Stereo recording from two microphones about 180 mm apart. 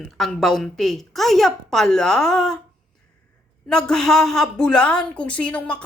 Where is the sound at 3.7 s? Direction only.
5° left (ahead or behind).